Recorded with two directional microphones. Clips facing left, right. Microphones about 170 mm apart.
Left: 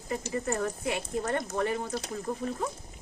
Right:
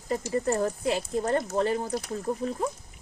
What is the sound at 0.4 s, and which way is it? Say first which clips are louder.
Speech: right 5 dB; 35° right (ahead or behind).